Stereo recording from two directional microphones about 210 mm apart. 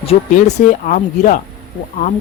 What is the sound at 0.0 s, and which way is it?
Speech, 30° left (ahead or behind).